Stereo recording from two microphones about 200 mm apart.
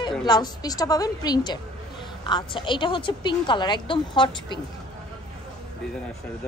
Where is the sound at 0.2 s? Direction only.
20° left (ahead or behind).